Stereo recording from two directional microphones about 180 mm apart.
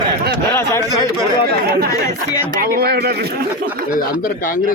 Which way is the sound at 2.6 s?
55° right (ahead or behind).